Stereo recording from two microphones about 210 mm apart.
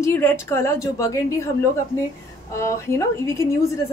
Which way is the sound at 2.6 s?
15° left (ahead or behind).